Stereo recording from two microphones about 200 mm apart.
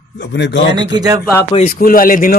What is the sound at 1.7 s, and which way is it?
Speech, 45° left (ahead or behind).